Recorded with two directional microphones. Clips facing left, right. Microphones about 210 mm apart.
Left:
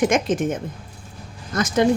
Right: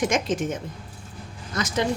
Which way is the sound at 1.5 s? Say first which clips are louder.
Left 5 dB; 50° left (ahead or behind).